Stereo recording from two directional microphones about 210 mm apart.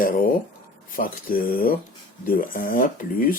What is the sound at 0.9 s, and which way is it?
Speech, 45° left (ahead or behind).